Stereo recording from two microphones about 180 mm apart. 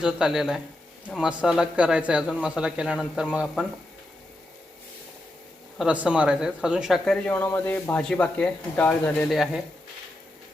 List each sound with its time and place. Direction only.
0.0 s speech: 5° right (ahead or behind)
5.7 s speech: 5° right (ahead or behind)